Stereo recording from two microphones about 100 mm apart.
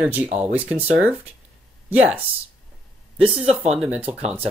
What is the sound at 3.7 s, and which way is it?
Speech, 10° right (ahead or behind).